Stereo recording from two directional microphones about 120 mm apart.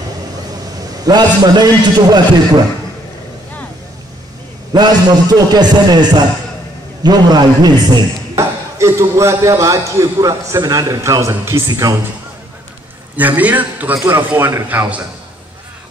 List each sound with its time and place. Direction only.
1.0 s a man's voice: 35° right (ahead or behind)
4.7 s a man's voice: 35° right (ahead or behind)
8.7 s a man's voice: 25° right (ahead or behind)
13.1 s a man's voice: 15° right (ahead or behind)